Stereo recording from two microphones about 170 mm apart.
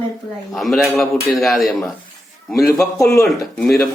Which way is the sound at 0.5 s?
Centre (ahead or behind).